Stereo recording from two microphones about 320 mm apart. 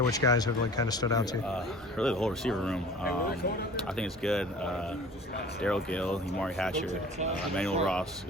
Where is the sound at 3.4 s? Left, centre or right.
Left.